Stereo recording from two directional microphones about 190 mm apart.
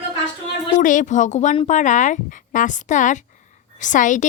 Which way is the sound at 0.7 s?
40° left (ahead or behind).